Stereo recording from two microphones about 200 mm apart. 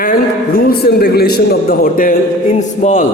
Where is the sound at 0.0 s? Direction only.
45° left (ahead or behind).